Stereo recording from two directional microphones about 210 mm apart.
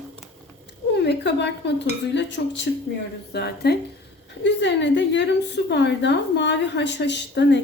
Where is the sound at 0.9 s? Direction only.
55° left (ahead or behind).